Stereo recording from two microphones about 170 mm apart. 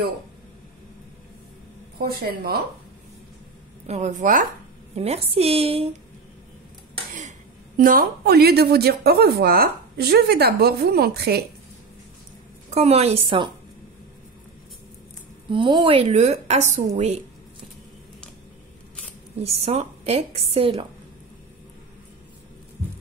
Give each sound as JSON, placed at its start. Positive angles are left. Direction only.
{"t": 2.0, "sound": "a woman's voice", "side_deg": -65}
{"t": 3.8, "sound": "a woman's voice", "side_deg": -40}
{"t": 4.9, "sound": "a woman's voice", "side_deg": -40}
{"t": 7.2, "sound": "a woman's voice", "side_deg": -50}
{"t": 12.6, "sound": "a woman's voice", "side_deg": -40}
{"t": 15.5, "sound": "a woman's voice", "side_deg": -30}
{"t": 19.3, "sound": "a woman's voice", "side_deg": -35}